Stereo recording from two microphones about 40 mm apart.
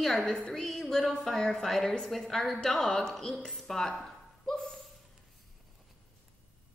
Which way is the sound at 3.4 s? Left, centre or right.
Centre.